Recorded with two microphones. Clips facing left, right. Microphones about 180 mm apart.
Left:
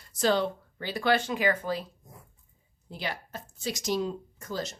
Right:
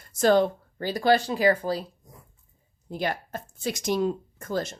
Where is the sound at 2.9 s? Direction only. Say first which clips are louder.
Right 7 dB; 50° right (ahead or behind).